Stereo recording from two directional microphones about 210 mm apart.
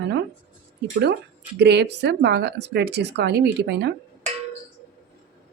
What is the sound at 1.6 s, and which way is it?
Speech, 55° right (ahead or behind).